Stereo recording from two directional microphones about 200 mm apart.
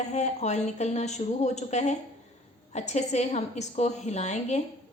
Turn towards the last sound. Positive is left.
turn(degrees=35)  # may be behind; listen again after turning